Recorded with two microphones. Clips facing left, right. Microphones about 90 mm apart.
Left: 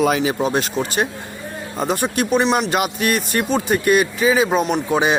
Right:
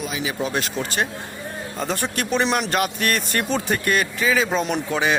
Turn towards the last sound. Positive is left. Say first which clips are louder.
# left 4 dB
turn(degrees=20)  # may be behind; listen again after turning